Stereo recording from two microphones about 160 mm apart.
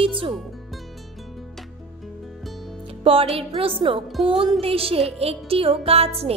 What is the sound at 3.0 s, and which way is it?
Speech, 35° right (ahead or behind).